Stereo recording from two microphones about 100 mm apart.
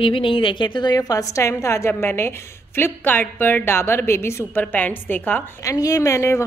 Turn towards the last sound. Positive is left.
turn(degrees=30)  # may be behind; listen again after turning